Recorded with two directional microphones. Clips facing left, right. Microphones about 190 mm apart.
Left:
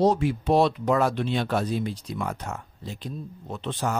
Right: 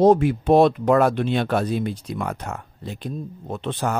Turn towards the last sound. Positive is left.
turn(degrees=-60)  # may be behind; listen again after turning